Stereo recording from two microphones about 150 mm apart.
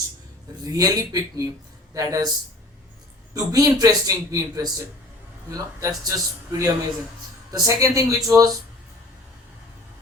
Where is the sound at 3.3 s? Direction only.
25° right (ahead or behind).